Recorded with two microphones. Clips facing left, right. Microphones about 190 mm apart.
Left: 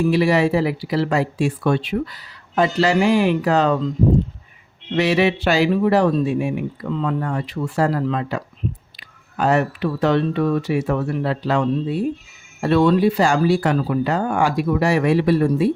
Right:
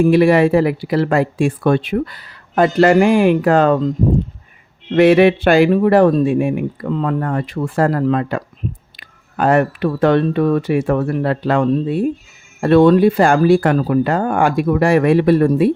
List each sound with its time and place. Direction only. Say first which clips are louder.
0.0 s speech: right 6 dB; 55° right (ahead or behind)